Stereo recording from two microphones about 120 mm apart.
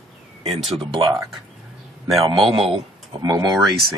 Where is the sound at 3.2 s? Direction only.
30° right (ahead or behind).